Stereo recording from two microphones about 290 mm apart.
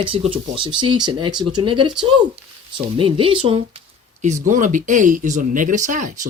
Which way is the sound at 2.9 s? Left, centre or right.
Centre.